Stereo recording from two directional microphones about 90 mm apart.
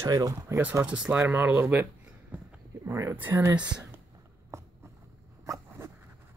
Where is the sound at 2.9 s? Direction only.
35° right (ahead or behind).